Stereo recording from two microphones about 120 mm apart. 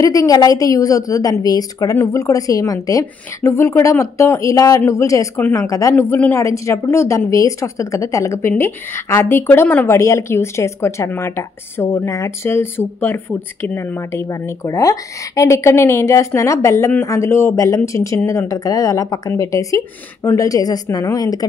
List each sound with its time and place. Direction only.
0.0 s a woman's voice: 30° left (ahead or behind); by 9.9 s 15° left (ahead or behind)
9.9 s a woman's voice: 25° left (ahead or behind)